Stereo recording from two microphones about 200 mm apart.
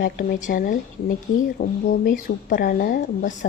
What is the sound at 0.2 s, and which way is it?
A woman's voice, 40° left (ahead or behind).